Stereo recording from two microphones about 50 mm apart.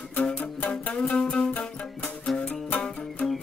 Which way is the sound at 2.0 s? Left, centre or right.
Centre.